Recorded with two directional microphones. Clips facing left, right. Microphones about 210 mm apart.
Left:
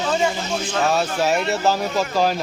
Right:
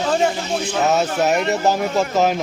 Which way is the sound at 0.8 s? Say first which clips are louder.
Right 2 dB; 20° right (ahead or behind).